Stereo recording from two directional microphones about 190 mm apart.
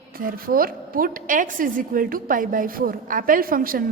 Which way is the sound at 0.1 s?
50° right (ahead or behind).